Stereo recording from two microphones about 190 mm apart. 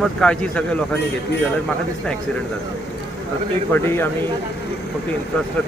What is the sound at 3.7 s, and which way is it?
Speech, 10° left (ahead or behind).